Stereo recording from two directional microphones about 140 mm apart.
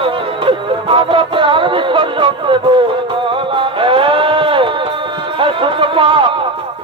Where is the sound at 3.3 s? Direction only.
40° right (ahead or behind).